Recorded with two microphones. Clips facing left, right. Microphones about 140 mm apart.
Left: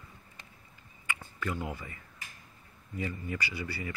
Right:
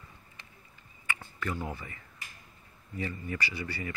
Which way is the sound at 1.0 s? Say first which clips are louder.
Even; 15° left (ahead or behind).